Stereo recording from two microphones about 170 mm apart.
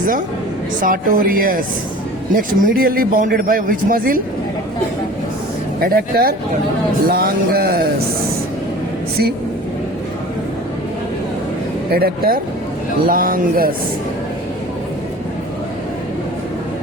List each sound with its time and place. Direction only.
0.8 s speech: 50° right (ahead or behind)
5.8 s speech: 60° right (ahead or behind)
11.9 s speech: 65° right (ahead or behind)